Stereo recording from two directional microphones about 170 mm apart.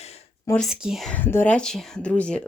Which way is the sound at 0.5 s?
Centre (ahead or behind).